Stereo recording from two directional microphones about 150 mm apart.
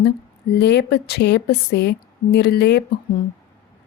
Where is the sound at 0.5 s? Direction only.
90° left.